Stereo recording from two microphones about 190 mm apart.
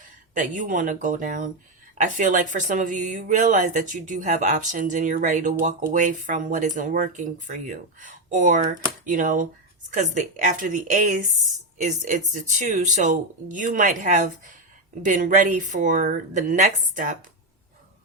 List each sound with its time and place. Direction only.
0.3 s speech: 45° right (ahead or behind)